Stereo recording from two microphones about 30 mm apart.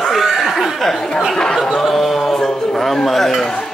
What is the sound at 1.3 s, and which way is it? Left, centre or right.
Speech, left.